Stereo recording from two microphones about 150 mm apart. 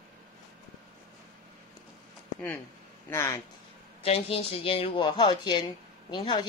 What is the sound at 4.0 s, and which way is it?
Speech, 40° left (ahead or behind).